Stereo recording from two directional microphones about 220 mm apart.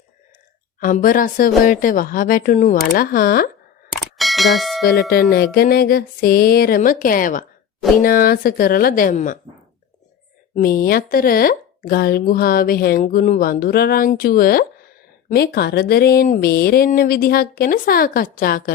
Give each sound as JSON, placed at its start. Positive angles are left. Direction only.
{"t": 0.8, "sound": "speech", "side_deg": 40}
{"t": 3.9, "sound": "bicycle bell", "side_deg": 0}
{"t": 4.9, "sound": "speech", "side_deg": 45}
{"t": 10.5, "sound": "speech", "side_deg": 40}